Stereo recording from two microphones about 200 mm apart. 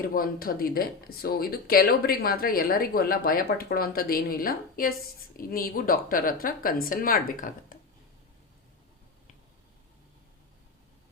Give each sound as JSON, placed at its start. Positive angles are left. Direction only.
{"t": 0.1, "sound": "speech", "side_deg": 45}